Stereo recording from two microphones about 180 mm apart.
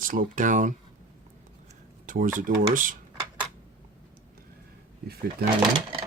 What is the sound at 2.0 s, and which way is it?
Speech, 45° right (ahead or behind).